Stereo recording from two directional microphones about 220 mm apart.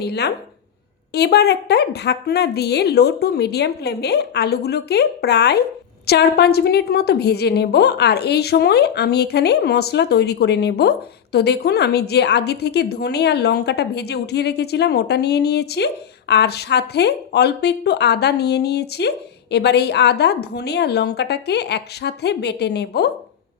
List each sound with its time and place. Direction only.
0.0 s a woman's voice: 50° left (ahead or behind)